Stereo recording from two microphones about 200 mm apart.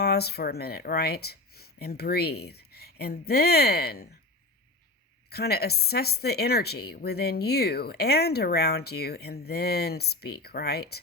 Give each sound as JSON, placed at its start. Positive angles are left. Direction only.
{"t": 0.0, "sound": "speech", "side_deg": 55}
{"t": 5.3, "sound": "speech", "side_deg": 50}